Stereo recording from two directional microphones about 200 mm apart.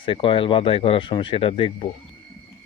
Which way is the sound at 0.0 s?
25° left (ahead or behind).